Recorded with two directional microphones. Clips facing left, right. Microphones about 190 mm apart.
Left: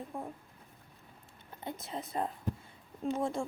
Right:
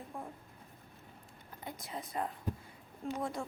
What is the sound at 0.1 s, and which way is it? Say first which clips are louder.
Speech: left 3 dB; 20° left (ahead or behind).